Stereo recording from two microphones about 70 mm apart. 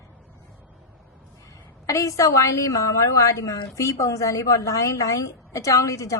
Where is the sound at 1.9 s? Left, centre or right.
Left.